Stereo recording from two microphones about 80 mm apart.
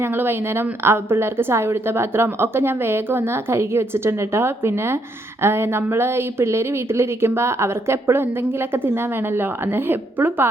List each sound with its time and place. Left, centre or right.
0.0 s speech: right